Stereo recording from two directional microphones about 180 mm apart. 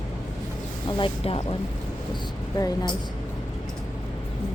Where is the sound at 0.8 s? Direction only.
30° left (ahead or behind).